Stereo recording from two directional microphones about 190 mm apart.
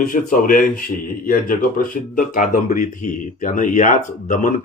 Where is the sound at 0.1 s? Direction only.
45° left (ahead or behind).